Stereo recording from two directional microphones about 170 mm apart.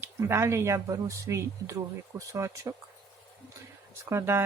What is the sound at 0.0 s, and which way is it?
Speech, 15° right (ahead or behind).